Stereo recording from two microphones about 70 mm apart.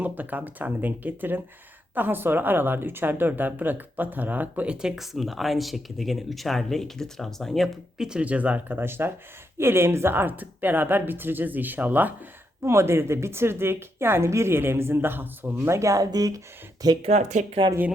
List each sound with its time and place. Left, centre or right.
0.0 s a woman's voice: right; by 7.7 s centre
7.9 s a woman's voice: centre
8.2 s speech: centre
12.6 s a woman's voice: right